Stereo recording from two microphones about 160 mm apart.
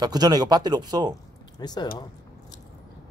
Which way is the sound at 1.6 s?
25° left (ahead or behind).